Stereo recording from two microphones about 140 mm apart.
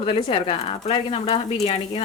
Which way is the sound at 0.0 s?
35° left (ahead or behind).